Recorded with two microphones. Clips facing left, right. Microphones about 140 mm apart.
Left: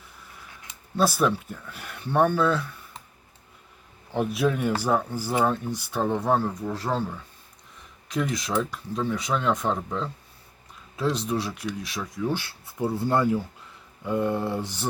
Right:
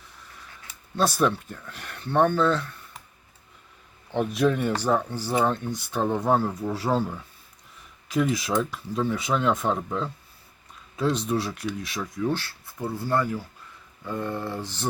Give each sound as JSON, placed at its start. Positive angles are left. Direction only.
{"t": 0.9, "sound": "speech", "side_deg": 5}
{"t": 4.1, "sound": "speech", "side_deg": 5}
{"t": 12.9, "sound": "speech", "side_deg": 20}